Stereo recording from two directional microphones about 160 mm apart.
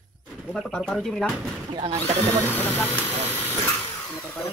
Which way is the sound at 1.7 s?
35° right (ahead or behind).